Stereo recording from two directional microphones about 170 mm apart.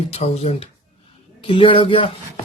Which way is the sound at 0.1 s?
40° left (ahead or behind).